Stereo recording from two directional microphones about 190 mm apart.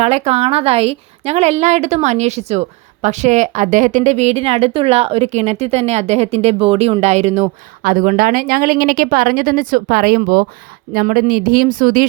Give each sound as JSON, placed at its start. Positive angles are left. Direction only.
{"t": 0.0, "sound": "a woman's voice", "side_deg": -35}